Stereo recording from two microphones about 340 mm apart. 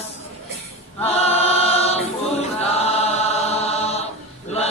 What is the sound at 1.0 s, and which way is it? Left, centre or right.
Choir, centre.